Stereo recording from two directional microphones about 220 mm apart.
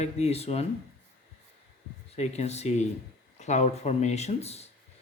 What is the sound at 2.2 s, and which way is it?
Speech, 30° left (ahead or behind).